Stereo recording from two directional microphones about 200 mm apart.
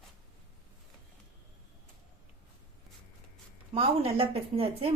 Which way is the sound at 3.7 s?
30° right (ahead or behind).